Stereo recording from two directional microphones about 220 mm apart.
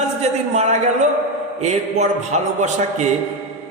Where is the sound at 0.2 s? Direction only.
30° right (ahead or behind).